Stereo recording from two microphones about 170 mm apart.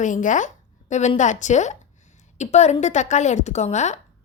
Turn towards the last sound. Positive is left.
turn(degrees=40)  # may be behind; listen again after turning